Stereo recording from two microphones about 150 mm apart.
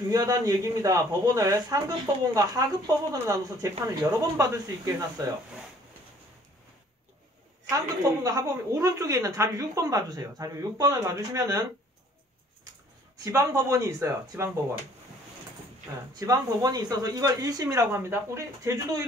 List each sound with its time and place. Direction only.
0.1 s speech: 25° right (ahead or behind)
7.7 s speech: 20° right (ahead or behind)
13.2 s speech: 20° right (ahead or behind)
16.2 s speech: 25° right (ahead or behind)